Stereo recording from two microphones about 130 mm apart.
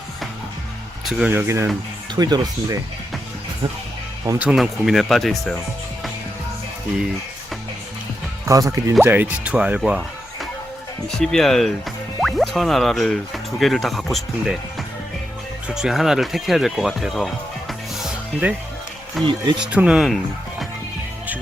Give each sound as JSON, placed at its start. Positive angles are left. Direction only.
{"t": 1.3, "sound": "speech", "side_deg": -20}
{"t": 2.1, "sound": "speech", "side_deg": -30}
{"t": 4.4, "sound": "speech", "side_deg": -5}
{"t": 8.4, "sound": "speech", "side_deg": -25}
{"t": 11.1, "sound": "speech", "side_deg": 5}
{"t": 19.2, "sound": "speech", "side_deg": -40}
{"t": 19.5, "sound": "speech", "side_deg": -10}